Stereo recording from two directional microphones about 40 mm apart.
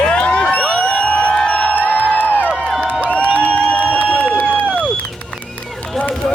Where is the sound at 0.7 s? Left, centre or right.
Left.